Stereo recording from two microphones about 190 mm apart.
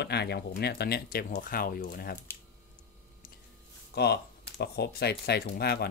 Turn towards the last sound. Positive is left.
turn(degrees=55)  # may be behind; listen again after turning